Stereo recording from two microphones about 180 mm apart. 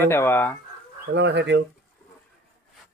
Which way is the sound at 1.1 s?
70° right (ahead or behind).